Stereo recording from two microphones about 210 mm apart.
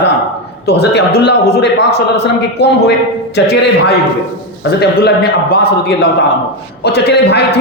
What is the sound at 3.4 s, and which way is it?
Speech, 55° left (ahead or behind).